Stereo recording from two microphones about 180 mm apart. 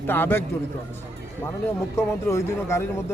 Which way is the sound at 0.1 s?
10° left (ahead or behind).